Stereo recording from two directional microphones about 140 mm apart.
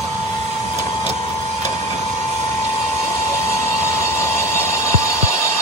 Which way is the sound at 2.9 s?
20° left (ahead or behind).